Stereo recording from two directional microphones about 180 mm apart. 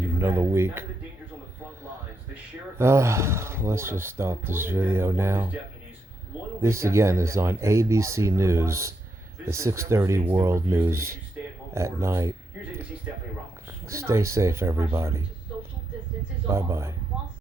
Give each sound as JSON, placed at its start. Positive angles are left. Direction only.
{"t": 0.2, "sound": "speech", "side_deg": -15}
{"t": 2.7, "sound": "speech", "side_deg": -15}
{"t": 6.6, "sound": "speech", "side_deg": -15}
{"t": 13.8, "sound": "speech", "side_deg": -15}
{"t": 16.5, "sound": "speech", "side_deg": -15}